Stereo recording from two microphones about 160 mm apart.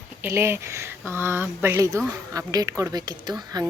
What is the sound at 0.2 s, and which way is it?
A woman's voice, 15° right (ahead or behind).